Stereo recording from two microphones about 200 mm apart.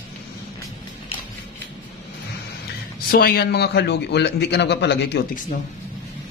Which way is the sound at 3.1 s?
50° left (ahead or behind).